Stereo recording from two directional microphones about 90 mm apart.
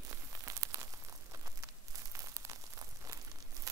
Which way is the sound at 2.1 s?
35° right (ahead or behind).